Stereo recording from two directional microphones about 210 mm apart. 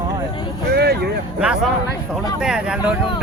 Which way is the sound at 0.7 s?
50° right (ahead or behind).